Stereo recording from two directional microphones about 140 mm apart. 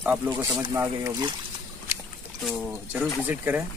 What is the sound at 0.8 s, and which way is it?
Speech, 20° right (ahead or behind).